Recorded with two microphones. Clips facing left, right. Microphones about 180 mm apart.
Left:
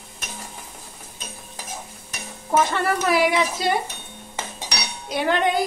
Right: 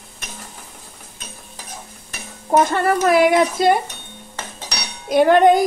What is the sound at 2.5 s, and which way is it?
Speech, 50° right (ahead or behind).